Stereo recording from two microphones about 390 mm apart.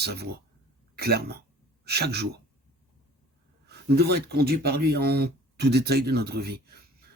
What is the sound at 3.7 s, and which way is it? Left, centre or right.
Speech, right.